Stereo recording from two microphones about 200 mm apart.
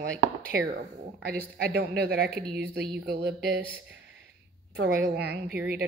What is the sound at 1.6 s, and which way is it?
Speech, 50° right (ahead or behind).